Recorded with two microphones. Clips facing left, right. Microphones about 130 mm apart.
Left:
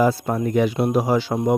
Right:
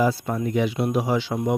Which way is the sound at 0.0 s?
50° left (ahead or behind).